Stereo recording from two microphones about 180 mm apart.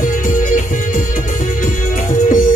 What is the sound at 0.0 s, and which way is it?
Music, 50° left (ahead or behind).